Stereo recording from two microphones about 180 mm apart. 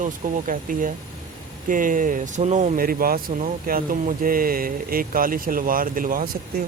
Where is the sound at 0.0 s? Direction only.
45° right (ahead or behind).